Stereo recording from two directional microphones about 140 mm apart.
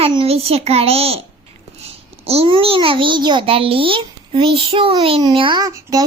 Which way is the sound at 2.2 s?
45° right (ahead or behind).